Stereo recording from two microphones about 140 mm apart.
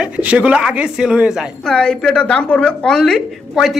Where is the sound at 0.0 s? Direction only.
10° right (ahead or behind).